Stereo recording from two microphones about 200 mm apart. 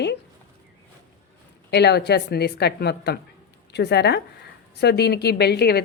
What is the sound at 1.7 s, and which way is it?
A woman's voice, 55° left (ahead or behind).